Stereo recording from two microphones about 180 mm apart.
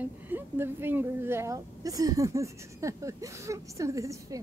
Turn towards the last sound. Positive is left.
turn(degrees=-15)  # may be behind; listen again after turning